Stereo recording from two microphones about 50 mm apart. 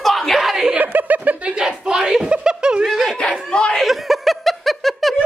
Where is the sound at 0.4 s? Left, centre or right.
Centre.